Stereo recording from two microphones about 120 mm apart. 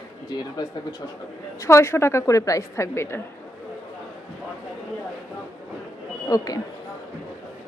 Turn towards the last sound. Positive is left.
turn(degrees=30)  # may be behind; listen again after turning